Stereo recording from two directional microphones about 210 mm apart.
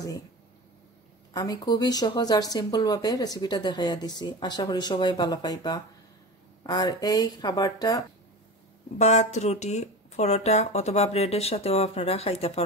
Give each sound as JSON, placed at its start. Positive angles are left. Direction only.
{"t": 1.3, "sound": "speech", "side_deg": 15}
{"t": 8.9, "sound": "speech", "side_deg": 30}